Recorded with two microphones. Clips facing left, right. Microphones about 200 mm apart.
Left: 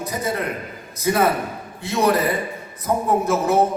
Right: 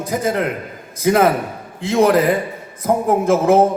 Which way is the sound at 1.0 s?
90° right.